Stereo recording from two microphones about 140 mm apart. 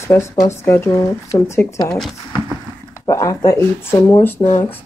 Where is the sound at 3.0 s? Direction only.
25° left (ahead or behind).